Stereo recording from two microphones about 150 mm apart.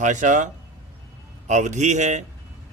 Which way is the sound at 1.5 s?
50° right (ahead or behind).